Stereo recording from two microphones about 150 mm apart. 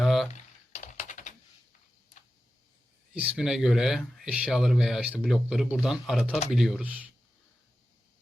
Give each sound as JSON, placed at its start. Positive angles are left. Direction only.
{"t": 0.0, "sound": "typing", "side_deg": 0}
{"t": 0.3, "sound": "typing", "side_deg": 50}
{"t": 3.2, "sound": "speech", "side_deg": -5}